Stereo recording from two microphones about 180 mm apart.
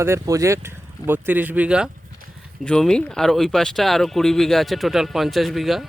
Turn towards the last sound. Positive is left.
turn(degrees=0)  # may be behind; listen again after turning